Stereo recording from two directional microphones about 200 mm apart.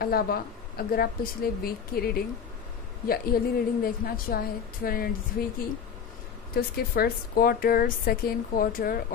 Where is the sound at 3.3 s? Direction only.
50° left (ahead or behind).